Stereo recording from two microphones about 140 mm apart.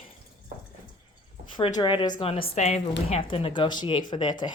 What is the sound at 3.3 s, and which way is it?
Speech, 40° left (ahead or behind).